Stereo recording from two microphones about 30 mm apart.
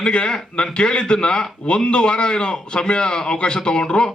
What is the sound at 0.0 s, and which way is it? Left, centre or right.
A man's voice, left.